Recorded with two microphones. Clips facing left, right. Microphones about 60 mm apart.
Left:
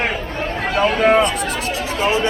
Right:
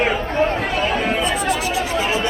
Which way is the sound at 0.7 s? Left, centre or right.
Left.